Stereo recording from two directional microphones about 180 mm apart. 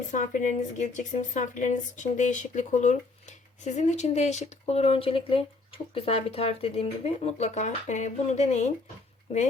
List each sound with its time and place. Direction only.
0.1 s speech: 45° left (ahead or behind)